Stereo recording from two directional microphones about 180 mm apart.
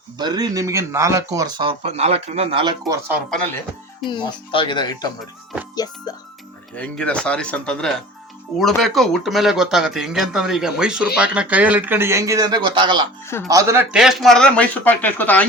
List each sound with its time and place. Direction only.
0.2 s speech: 25° right (ahead or behind)
3.2 s speech: 5° left (ahead or behind)
4.0 s speech: 25° left (ahead or behind)
6.7 s a man's voice: 5° left (ahead or behind); by 13.1 s 25° right (ahead or behind)
13.5 s speech: 15° right (ahead or behind)
13.9 s a man's voice: 5° right (ahead or behind)